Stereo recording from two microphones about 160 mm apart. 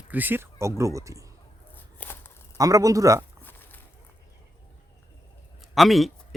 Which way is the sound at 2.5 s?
20° right (ahead or behind).